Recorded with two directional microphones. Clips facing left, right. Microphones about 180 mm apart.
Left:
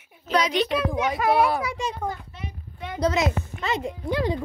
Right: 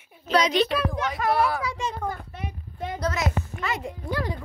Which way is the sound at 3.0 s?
20° left (ahead or behind).